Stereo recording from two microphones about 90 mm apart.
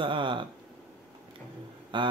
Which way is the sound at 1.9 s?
60° right (ahead or behind).